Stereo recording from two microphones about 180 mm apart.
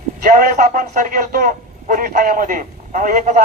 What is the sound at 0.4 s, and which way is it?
A man's voice, 50° right (ahead or behind).